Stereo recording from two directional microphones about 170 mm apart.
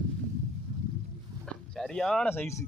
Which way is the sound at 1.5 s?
5° left (ahead or behind).